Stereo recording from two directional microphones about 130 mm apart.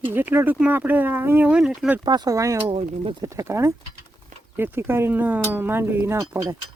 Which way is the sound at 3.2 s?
25° right (ahead or behind).